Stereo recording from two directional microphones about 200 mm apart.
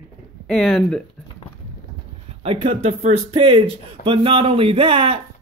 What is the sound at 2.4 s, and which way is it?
Speech, 30° right (ahead or behind).